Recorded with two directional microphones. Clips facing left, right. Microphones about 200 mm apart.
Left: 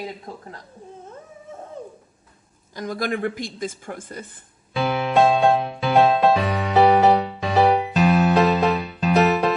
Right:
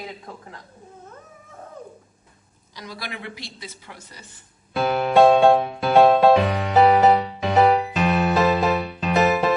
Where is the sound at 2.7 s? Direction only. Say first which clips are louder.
Left 10 dB; 50° left (ahead or behind).